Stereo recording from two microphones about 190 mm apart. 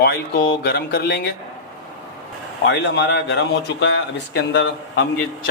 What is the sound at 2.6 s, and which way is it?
A man's voice, 70° left (ahead or behind).